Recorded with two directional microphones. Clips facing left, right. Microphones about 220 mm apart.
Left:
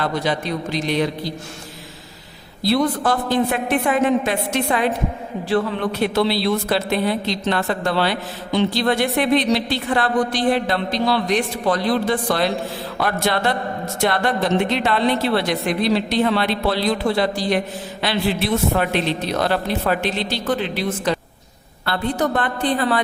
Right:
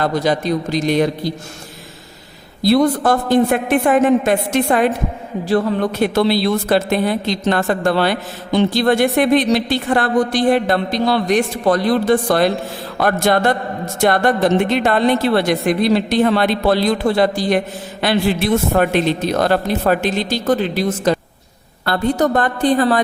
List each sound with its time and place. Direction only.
0.0 s a woman's voice: 40° right (ahead or behind)
2.6 s a woman's voice: 45° right (ahead or behind)